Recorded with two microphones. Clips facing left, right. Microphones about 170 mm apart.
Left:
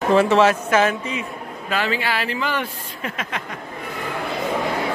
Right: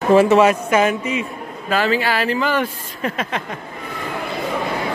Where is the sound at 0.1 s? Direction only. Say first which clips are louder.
Right 3 dB; 15° right (ahead or behind).